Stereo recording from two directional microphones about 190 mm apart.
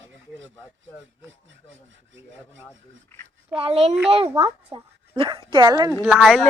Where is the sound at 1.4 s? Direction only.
75° right (ahead or behind).